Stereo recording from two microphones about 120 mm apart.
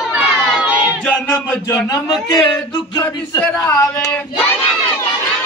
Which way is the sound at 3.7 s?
30° left (ahead or behind).